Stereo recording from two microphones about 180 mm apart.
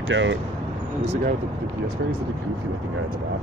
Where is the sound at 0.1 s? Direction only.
90° right.